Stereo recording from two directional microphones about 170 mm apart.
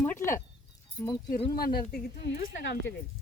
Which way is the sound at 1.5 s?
60° left (ahead or behind).